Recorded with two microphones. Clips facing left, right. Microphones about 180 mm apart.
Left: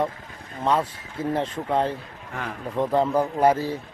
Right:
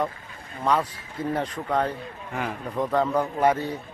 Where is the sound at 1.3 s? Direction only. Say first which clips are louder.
Left 2 dB; 25° left (ahead or behind).